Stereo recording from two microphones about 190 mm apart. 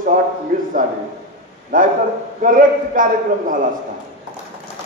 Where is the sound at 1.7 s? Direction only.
45° right (ahead or behind).